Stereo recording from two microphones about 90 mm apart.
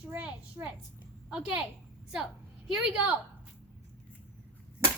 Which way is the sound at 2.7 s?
10° right (ahead or behind).